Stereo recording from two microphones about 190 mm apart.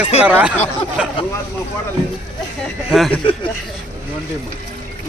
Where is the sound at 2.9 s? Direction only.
Centre (ahead or behind).